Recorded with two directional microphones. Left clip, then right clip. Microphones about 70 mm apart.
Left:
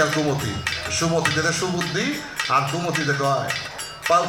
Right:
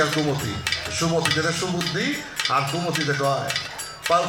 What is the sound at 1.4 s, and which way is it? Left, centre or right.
Speech, left.